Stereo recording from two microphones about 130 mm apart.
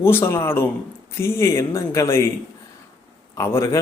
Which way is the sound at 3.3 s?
20° left (ahead or behind).